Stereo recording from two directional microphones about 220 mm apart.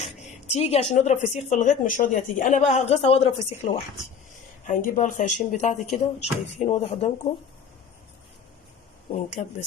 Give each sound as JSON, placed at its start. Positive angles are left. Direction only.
{"t": 0.0, "sound": "speech", "side_deg": 30}
{"t": 9.1, "sound": "speech", "side_deg": 30}